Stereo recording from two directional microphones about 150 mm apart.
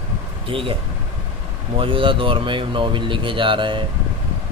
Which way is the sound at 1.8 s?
35° right (ahead or behind).